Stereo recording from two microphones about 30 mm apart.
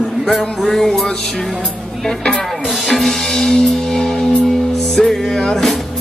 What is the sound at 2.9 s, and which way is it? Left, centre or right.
Music, centre.